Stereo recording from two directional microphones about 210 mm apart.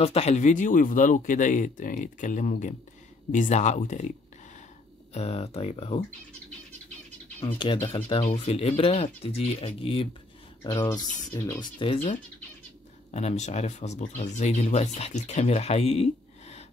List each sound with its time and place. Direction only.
0.0 s speech: 30° left (ahead or behind)
5.1 s speech: 30° left (ahead or behind)
7.3 s speech: 25° left (ahead or behind)
11.8 s speech: 30° left (ahead or behind)